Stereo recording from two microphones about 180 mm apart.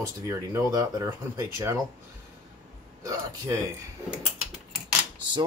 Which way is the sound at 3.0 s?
20° right (ahead or behind).